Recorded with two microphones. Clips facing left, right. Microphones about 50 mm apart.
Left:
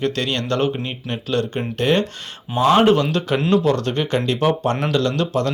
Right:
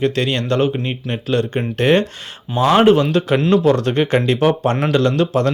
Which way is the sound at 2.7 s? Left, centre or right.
Centre.